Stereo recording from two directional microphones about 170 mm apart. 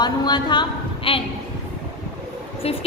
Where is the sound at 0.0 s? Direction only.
25° left (ahead or behind).